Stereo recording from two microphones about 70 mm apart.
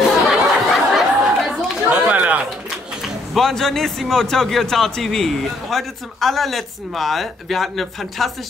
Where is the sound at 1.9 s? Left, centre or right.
Centre.